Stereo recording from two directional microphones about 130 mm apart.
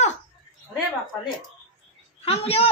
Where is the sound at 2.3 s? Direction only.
50° left (ahead or behind).